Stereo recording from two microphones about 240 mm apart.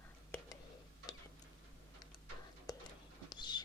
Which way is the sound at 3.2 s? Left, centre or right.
Centre.